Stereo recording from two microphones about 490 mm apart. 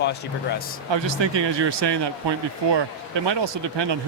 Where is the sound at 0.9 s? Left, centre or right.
Right.